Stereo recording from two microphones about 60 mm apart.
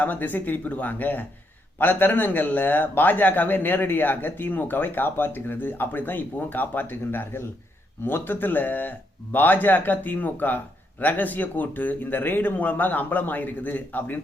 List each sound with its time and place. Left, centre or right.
0.0 s a man's voice: left